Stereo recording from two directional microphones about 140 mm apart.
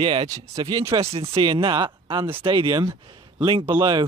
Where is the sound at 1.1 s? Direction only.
45° right (ahead or behind).